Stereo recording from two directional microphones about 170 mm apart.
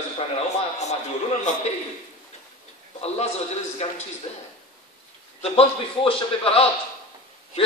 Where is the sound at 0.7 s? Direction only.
45° left (ahead or behind).